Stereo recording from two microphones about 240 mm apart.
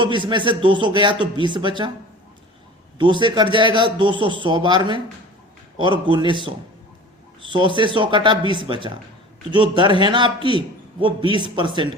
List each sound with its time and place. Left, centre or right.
0.0 s speech: centre
3.0 s speech: centre
7.8 s speech: right